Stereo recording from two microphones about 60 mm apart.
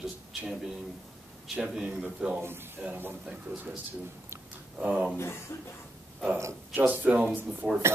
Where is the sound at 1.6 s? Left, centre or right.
Centre.